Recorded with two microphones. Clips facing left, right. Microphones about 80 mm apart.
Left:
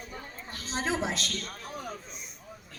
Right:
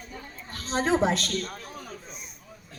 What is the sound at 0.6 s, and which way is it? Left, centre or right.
Speech, right.